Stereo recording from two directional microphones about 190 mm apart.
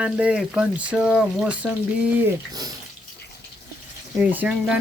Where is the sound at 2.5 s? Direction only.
20° right (ahead or behind).